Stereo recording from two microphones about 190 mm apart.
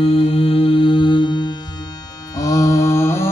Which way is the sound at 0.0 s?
30° left (ahead or behind).